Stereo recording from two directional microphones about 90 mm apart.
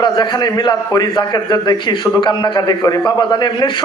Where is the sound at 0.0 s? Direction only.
55° left (ahead or behind).